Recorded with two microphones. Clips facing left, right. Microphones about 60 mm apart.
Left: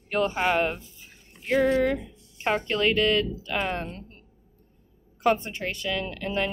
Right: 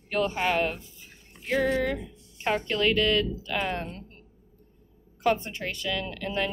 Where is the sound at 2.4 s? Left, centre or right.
Left.